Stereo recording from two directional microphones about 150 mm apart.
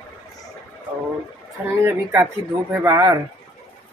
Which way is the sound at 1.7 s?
15° right (ahead or behind).